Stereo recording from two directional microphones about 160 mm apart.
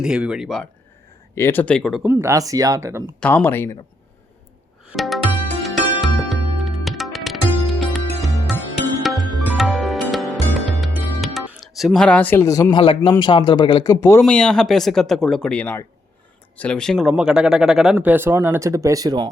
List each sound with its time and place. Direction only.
0.0 s speech: 5° right (ahead or behind)
1.4 s speech: 15° left (ahead or behind)
2.0 s speech: 15° right (ahead or behind)
3.2 s speech: 10° left (ahead or behind)
4.9 s music: centre (ahead or behind)
11.2 s speech: centre (ahead or behind)
17.9 s speech: 15° right (ahead or behind)